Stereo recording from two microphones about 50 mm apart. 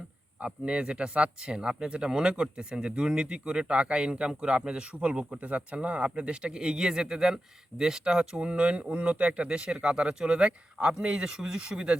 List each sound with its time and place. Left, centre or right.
0.4 s speech: centre